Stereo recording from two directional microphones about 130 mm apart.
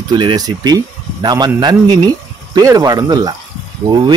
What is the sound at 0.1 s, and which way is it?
Speech, 35° right (ahead or behind).